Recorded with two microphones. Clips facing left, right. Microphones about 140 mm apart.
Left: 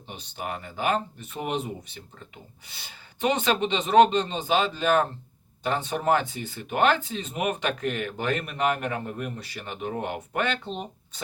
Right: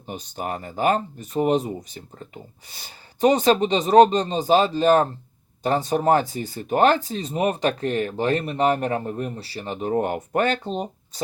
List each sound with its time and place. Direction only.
0.1 s speech: 40° right (ahead or behind)